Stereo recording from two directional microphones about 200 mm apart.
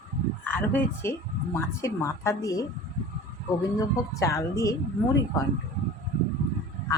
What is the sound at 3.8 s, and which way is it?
Speech, 15° left (ahead or behind).